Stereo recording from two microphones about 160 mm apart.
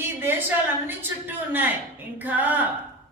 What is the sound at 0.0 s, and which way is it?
Speech, 15° right (ahead or behind).